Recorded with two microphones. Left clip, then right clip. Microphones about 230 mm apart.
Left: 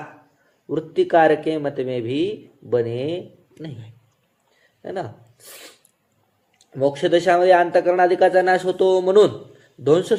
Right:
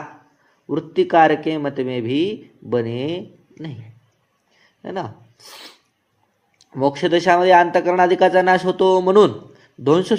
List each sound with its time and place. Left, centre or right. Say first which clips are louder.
0.7 s a man's voice: right 1 dB; right
4.8 s speech: right 1 dB; right
6.7 s a man's voice: even; right